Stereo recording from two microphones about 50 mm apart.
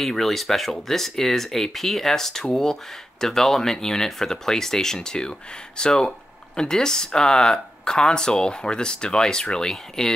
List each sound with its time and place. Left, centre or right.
0.0 s speech: centre